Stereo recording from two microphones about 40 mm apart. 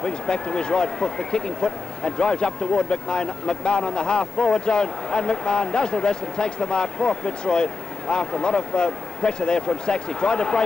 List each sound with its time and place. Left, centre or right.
0.0 s speech: left